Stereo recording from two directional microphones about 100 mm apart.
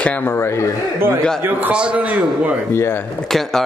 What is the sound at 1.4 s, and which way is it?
A man's voice, 15° right (ahead or behind).